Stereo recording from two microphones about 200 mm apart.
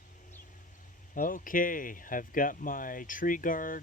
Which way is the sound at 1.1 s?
45° left (ahead or behind).